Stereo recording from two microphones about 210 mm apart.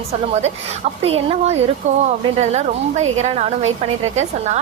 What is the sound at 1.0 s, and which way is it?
A woman's voice, 30° right (ahead or behind).